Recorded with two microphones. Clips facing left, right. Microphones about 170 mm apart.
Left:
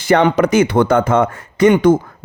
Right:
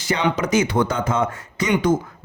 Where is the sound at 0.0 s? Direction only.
55° left (ahead or behind).